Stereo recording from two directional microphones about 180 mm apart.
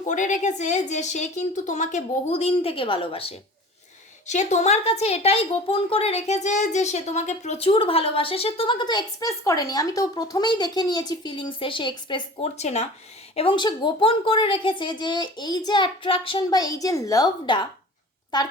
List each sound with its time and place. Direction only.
0.1 s a woman's voice: 45° left (ahead or behind); by 18.5 s 25° left (ahead or behind)